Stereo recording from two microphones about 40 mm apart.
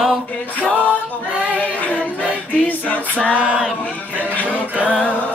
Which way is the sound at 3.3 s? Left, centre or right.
Right.